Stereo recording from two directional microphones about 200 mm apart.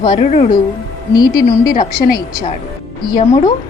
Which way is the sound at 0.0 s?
25° left (ahead or behind).